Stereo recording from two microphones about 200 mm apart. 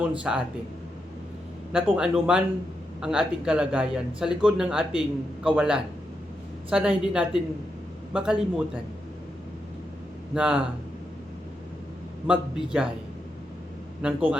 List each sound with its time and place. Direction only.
0.2 s speech: 5° right (ahead or behind)
1.7 s speech: 5° right (ahead or behind)
10.3 s speech: 5° right (ahead or behind)
12.3 s speech: 5° right (ahead or behind)
14.0 s a man's voice: 5° right (ahead or behind)